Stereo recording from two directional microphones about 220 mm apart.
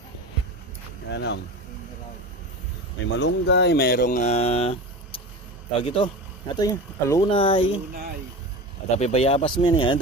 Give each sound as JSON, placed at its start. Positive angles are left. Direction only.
{"t": 1.1, "sound": "speech", "side_deg": 50}
{"t": 3.2, "sound": "speech", "side_deg": 55}
{"t": 8.9, "sound": "speech", "side_deg": 30}